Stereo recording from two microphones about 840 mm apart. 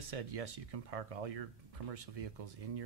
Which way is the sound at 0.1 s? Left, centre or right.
Right.